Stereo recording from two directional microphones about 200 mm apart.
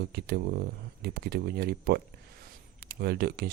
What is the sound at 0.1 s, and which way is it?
Speech, 55° right (ahead or behind).